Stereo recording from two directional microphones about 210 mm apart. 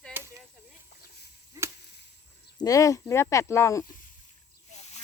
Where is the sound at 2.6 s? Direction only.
15° left (ahead or behind).